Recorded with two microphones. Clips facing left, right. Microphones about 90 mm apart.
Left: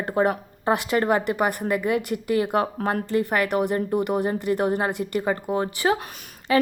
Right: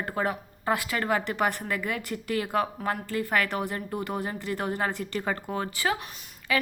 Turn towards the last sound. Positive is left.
turn(degrees=30)  # may be behind; listen again after turning